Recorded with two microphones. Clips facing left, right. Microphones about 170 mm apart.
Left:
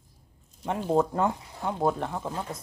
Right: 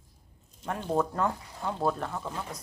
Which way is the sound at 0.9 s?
20° left (ahead or behind).